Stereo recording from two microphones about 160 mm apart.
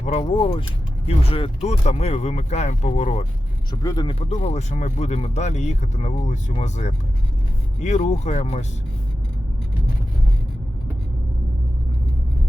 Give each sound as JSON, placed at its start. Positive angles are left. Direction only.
{"t": 0.0, "sound": "speech", "side_deg": 40}
{"t": 3.7, "sound": "speech", "side_deg": 25}
{"t": 4.1, "sound": "speech", "side_deg": 40}